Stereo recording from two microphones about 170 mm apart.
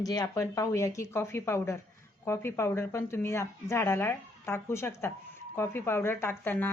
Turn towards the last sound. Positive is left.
turn(degrees=10)  # may be behind; listen again after turning